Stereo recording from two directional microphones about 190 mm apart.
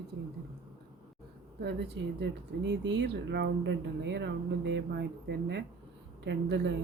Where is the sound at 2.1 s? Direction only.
65° right (ahead or behind).